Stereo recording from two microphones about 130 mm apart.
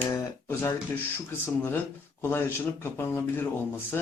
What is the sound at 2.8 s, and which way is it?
Speech, 20° left (ahead or behind).